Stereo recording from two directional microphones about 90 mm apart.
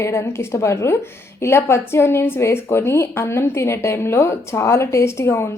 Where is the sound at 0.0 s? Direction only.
30° left (ahead or behind).